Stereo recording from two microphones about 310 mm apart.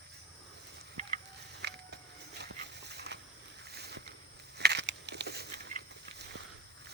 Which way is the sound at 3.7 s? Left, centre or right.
Right.